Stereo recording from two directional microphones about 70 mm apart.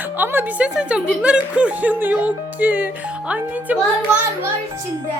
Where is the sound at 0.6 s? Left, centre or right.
Centre.